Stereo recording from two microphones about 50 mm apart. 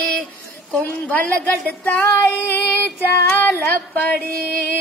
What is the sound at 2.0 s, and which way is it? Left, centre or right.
Music, left.